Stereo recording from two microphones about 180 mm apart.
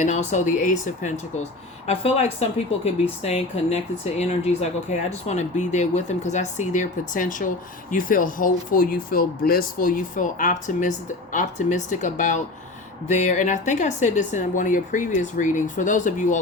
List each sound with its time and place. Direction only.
0.0 s speech: 40° left (ahead or behind)